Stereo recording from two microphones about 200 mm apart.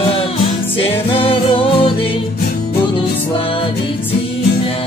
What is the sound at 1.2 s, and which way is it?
Music, 25° left (ahead or behind).